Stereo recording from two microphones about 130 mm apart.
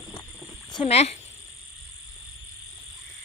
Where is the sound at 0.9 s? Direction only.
55° left (ahead or behind).